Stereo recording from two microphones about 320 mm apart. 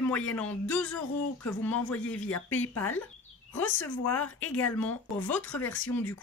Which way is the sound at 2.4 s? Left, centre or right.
Left.